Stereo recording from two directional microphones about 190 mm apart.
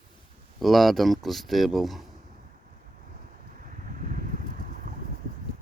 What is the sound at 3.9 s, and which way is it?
Vehicle, 45° right (ahead or behind).